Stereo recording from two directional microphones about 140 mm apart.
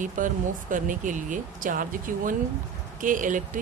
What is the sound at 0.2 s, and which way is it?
Speech, 70° right (ahead or behind).